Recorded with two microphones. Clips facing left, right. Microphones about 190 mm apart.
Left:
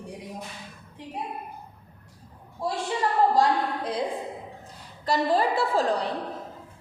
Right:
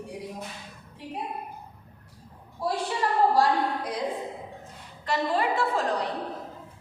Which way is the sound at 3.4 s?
30° left (ahead or behind).